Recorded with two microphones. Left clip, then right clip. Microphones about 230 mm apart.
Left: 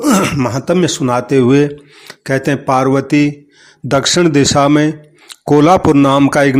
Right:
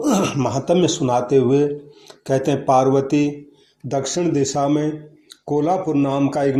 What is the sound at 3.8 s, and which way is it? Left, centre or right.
A man's voice, left.